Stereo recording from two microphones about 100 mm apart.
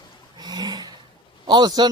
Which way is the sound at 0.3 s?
45° right (ahead or behind).